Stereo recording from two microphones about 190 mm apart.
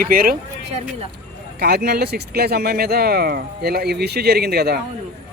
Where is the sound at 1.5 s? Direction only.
55° right (ahead or behind).